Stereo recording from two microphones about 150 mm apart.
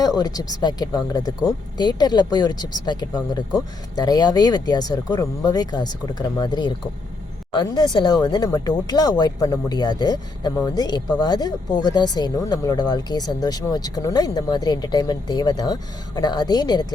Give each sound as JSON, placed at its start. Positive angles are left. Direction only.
{"t": 0.0, "sound": "speech", "side_deg": 25}